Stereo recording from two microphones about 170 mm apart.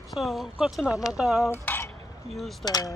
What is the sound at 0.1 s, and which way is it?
Speech, centre (ahead or behind).